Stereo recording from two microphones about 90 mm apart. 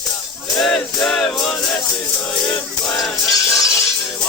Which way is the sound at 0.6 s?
5° left (ahead or behind).